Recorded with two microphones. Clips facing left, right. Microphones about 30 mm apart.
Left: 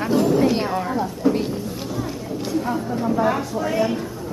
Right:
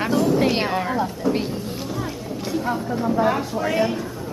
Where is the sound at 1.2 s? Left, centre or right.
Centre.